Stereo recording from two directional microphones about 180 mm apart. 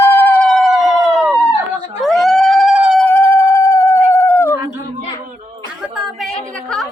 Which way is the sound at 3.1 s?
10° left (ahead or behind).